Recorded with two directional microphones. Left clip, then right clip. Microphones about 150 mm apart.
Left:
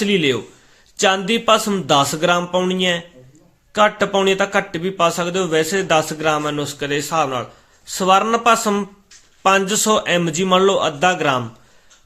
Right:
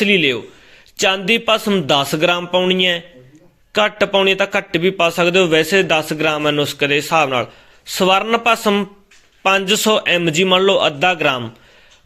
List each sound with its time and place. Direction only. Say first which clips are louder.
0.0 s a man's voice: right 3 dB; 20° right (ahead or behind)